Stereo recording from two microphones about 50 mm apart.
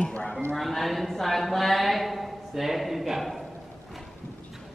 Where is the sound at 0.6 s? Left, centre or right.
Centre.